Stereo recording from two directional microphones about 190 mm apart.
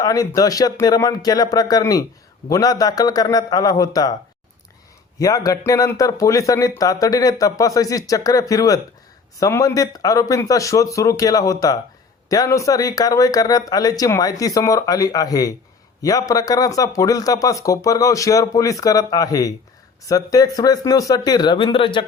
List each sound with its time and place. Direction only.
0.0 s speech: 20° left (ahead or behind)
5.2 s speech: 20° left (ahead or behind)